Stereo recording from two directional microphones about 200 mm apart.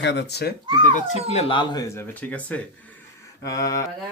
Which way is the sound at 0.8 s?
35° left (ahead or behind).